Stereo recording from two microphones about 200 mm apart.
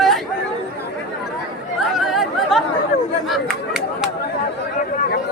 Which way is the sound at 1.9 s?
Centre (ahead or behind).